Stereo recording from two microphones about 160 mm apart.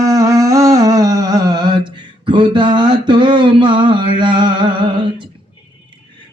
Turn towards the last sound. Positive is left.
turn(degrees=-30)  # may be behind; listen again after turning